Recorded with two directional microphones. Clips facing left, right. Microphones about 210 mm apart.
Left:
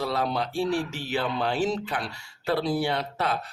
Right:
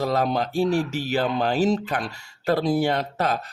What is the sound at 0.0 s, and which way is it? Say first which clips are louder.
Speech: right 4 dB; 45° right (ahead or behind).